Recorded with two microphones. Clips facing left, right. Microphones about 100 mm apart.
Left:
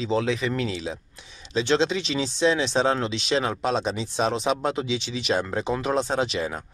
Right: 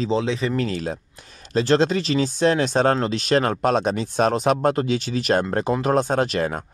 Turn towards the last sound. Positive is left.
turn(degrees=-50)  # may be behind; listen again after turning